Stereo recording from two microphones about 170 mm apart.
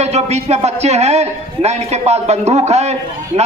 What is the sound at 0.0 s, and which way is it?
A man's voice, 40° right (ahead or behind).